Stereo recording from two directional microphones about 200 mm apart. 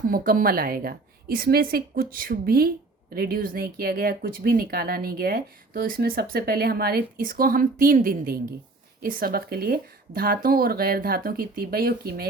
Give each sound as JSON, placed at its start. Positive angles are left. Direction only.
{"t": 0.0, "sound": "speech", "side_deg": -45}